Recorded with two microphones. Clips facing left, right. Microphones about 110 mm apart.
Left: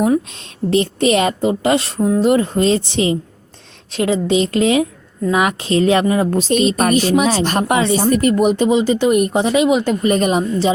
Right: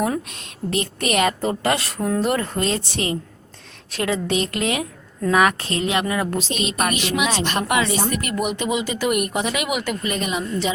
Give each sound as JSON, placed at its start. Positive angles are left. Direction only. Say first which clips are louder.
{"t": 0.3, "sound": "a woman's voice", "louder": "left 8 dB", "side_deg": 30}
{"t": 2.0, "sound": "a woman's voice", "louder": "left 7 dB", "side_deg": 15}
{"t": 5.8, "sound": "speech", "louder": "left 7 dB", "side_deg": 35}
{"t": 6.4, "sound": "speech", "louder": "left 8 dB", "side_deg": 40}